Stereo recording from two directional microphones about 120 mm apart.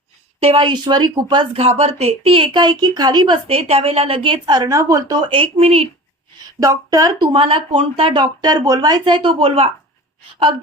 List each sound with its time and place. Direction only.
0.3 s a woman's voice: 50° right (ahead or behind)
1.5 s speech: 65° right (ahead or behind)
6.6 s speech: 30° right (ahead or behind)
7.3 s speech: 50° right (ahead or behind)